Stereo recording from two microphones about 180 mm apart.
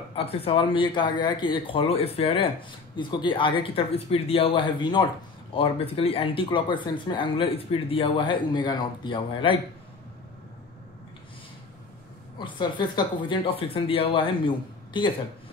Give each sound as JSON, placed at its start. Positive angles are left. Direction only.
{"t": 0.1, "sound": "speech", "side_deg": 35}
{"t": 12.4, "sound": "speech", "side_deg": 25}